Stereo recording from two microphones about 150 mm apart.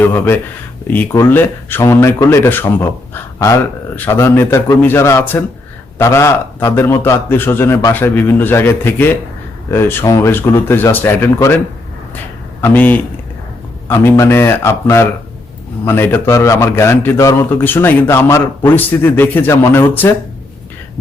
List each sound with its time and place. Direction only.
0.0 s speech: 15° left (ahead or behind)
12.6 s speech: 10° left (ahead or behind)